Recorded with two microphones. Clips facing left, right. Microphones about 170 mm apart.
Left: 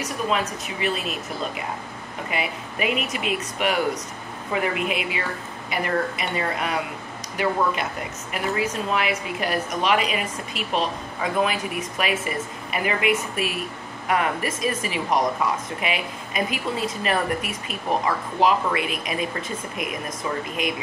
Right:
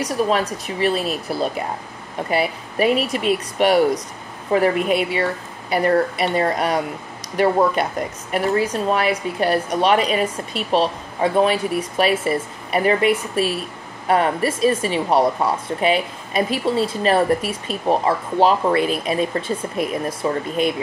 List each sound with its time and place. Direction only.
0.0 s speech: 35° right (ahead or behind)